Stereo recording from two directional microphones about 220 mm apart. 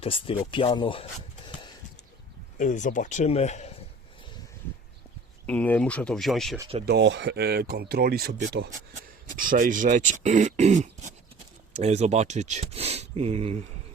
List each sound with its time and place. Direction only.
0.0 s speech: 25° left (ahead or behind)
2.6 s speech: 35° left (ahead or behind)
5.5 s speech: 5° left (ahead or behind)
6.8 s speech: 50° right (ahead or behind)
9.3 s speech: 40° right (ahead or behind)